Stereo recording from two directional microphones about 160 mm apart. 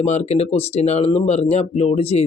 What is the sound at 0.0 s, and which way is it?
Speech, 45° left (ahead or behind).